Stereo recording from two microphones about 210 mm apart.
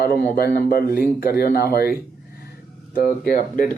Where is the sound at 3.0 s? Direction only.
40° left (ahead or behind).